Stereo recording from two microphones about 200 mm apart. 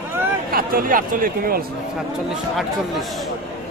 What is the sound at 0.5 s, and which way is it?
Speech, 45° right (ahead or behind).